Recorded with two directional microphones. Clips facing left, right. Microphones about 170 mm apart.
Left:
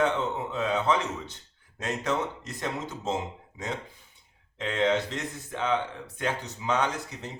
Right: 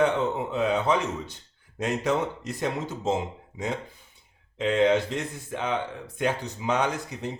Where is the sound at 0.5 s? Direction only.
10° right (ahead or behind).